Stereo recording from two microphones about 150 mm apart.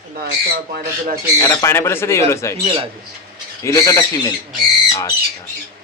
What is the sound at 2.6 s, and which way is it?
Speech, 35° right (ahead or behind).